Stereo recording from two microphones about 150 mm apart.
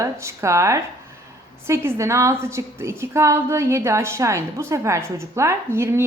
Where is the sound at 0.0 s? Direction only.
20° right (ahead or behind).